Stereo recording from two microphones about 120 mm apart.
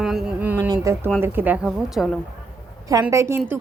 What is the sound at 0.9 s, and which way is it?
Speech, 25° right (ahead or behind).